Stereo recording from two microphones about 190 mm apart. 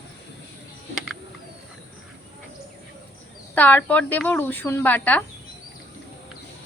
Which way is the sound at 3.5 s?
10° left (ahead or behind).